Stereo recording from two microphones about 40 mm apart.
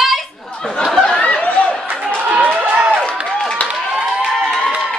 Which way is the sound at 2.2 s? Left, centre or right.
Right.